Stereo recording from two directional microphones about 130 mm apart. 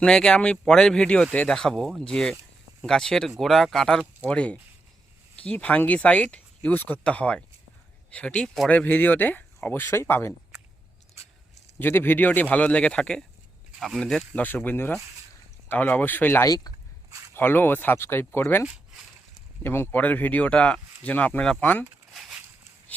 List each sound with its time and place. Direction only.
0.0 s speech: 5° left (ahead or behind)
11.8 s speech: 15° left (ahead or behind)
17.1 s a sound: 20° right (ahead or behind)
17.3 s speech: 15° left (ahead or behind)
19.6 s speech: 15° left (ahead or behind)
22.1 s a sound: centre (ahead or behind)